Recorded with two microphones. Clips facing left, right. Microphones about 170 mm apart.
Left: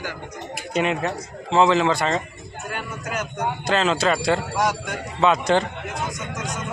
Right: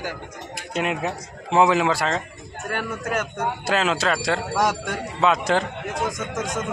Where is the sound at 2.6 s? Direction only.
55° right (ahead or behind).